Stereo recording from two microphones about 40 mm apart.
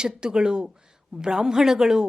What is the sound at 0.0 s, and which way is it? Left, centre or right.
A woman's voice, centre.